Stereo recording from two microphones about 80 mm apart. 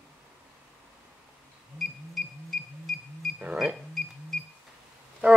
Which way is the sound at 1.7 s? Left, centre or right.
Centre.